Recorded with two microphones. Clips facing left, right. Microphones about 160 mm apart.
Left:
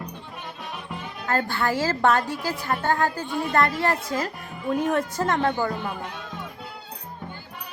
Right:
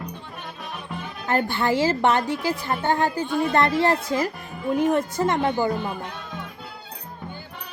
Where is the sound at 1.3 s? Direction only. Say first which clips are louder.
Right 2 dB; 20° right (ahead or behind).